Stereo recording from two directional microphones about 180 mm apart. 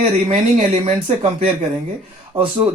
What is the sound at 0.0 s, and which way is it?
Speech, 35° right (ahead or behind).